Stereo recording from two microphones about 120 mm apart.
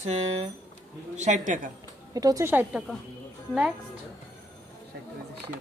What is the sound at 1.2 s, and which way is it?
Speech, 90° right.